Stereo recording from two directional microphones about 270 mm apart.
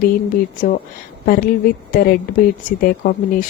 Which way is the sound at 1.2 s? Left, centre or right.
Left.